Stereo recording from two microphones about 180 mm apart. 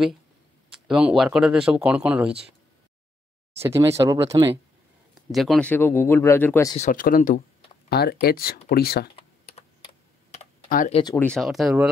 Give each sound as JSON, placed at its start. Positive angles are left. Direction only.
{"t": 0.7, "sound": "speech", "side_deg": -5}
{"t": 3.5, "sound": "speech", "side_deg": -15}
{"t": 5.3, "sound": "speech", "side_deg": 0}
{"t": 6.8, "sound": "speech", "side_deg": 50}
{"t": 7.9, "sound": "speech", "side_deg": 60}
{"t": 9.1, "sound": "computer keyboard", "side_deg": 35}
{"t": 11.1, "sound": "speech", "side_deg": 5}